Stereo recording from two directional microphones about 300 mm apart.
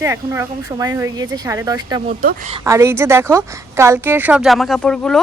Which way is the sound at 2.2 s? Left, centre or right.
Right.